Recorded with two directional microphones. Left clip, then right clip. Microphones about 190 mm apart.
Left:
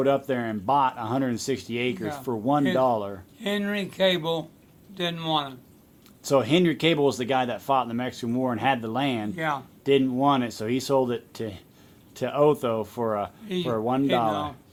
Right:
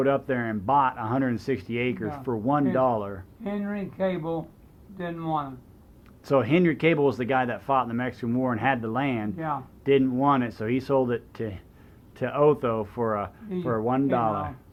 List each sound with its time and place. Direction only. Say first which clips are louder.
0.0 s speech: left 1 dB; 30° left (ahead or behind)